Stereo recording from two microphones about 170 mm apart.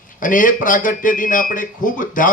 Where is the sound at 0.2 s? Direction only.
50° left (ahead or behind).